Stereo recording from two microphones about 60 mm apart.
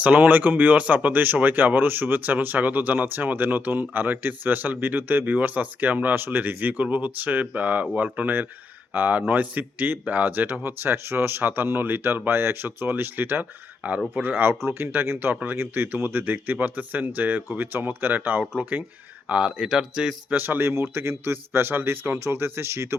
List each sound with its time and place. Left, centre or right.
0.0 s speech: right
19.3 s speech: centre
20.3 s speech: right